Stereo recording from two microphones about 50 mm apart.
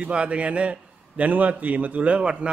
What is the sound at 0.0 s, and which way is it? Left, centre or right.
A man's voice, right.